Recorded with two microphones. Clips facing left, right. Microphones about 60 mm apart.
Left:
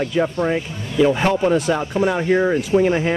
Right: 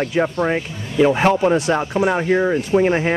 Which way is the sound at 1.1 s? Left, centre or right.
Centre.